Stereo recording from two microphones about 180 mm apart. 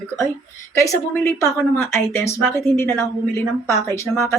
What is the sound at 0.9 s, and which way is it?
A woman's voice, 15° left (ahead or behind).